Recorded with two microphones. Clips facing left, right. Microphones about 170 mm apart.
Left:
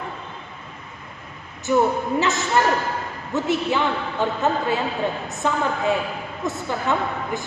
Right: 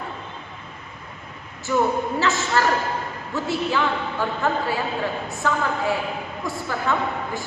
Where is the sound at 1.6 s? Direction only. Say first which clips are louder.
Left 2 dB; 20° left (ahead or behind).